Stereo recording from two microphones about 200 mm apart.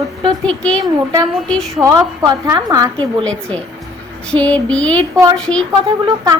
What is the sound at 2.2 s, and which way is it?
Speech, 20° right (ahead or behind).